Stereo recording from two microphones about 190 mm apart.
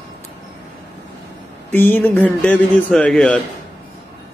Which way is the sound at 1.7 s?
10° left (ahead or behind).